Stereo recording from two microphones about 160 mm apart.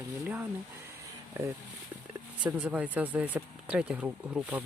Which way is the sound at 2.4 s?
10° right (ahead or behind).